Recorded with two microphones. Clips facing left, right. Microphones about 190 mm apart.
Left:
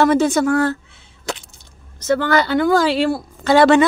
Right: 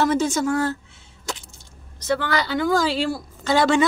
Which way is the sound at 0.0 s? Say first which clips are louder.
Left 6 dB; 65° left (ahead or behind).